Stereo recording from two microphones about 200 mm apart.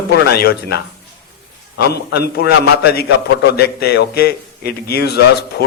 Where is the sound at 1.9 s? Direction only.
55° left (ahead or behind).